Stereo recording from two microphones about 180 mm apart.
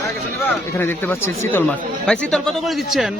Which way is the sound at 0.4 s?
10° left (ahead or behind).